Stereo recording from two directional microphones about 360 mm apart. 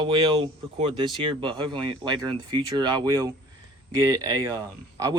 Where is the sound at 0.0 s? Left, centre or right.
Centre.